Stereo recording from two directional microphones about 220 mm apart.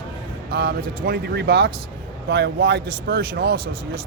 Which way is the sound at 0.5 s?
45° right (ahead or behind).